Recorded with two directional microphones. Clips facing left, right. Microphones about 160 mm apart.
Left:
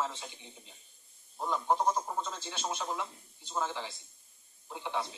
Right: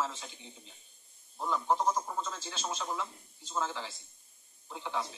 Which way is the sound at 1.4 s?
15° left (ahead or behind).